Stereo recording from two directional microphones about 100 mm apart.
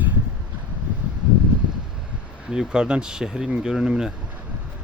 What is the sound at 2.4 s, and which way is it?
Speech, 5° right (ahead or behind).